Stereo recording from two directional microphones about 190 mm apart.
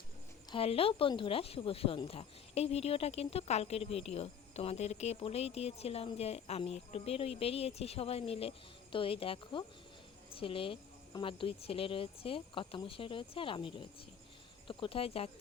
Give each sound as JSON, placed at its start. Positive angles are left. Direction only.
{"t": 0.5, "sound": "speech", "side_deg": 30}